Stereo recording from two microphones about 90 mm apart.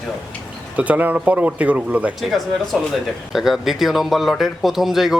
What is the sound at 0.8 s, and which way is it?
Speech, 15° right (ahead or behind).